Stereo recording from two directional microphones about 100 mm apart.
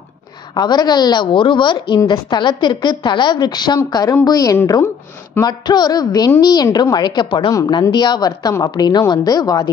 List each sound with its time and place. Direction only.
0.6 s a woman's voice: 45° left (ahead or behind)